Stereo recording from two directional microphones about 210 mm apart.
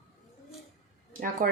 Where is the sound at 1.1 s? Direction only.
40° right (ahead or behind).